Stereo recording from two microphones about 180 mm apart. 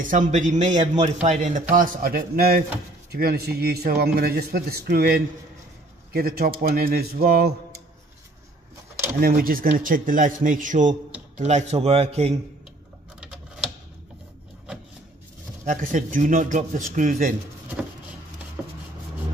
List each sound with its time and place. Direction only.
0.0 s a man's voice: 45° right (ahead or behind)
9.2 s a man's voice: 55° right (ahead or behind); by 12.4 s 35° right (ahead or behind)
15.6 s a man's voice: 45° right (ahead or behind)
18.6 s a sound: 5° right (ahead or behind)